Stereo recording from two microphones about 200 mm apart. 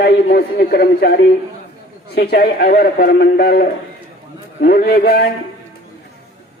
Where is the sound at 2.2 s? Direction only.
50° left (ahead or behind).